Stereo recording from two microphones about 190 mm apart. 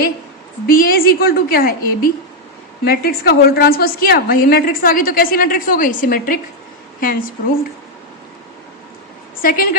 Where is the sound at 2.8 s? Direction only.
55° left (ahead or behind).